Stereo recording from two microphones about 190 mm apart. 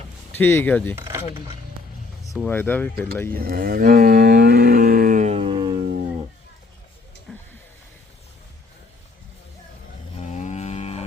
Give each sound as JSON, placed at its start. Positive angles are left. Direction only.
{"t": 0.3, "sound": "speech", "side_deg": 10}
{"t": 0.9, "sound": "a sound", "side_deg": -15}
{"t": 2.3, "sound": "speech", "side_deg": 5}
{"t": 3.2, "sound": "cattle", "side_deg": -50}
{"t": 7.3, "sound": "a sound", "side_deg": 5}
{"t": 10.2, "sound": "cattle", "side_deg": 40}